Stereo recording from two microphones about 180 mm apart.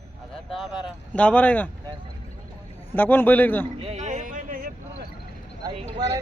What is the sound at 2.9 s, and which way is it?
Speech, 10° left (ahead or behind).